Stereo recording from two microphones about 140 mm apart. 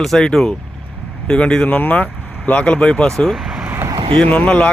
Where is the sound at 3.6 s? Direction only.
20° right (ahead or behind).